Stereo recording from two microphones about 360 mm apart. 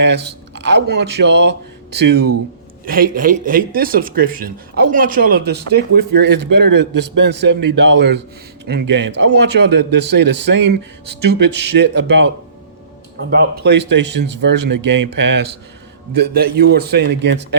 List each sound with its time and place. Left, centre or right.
0.0 s speech: right
13.6 s speech: right